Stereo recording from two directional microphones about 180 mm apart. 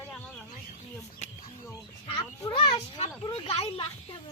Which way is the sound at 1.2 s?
35° left (ahead or behind).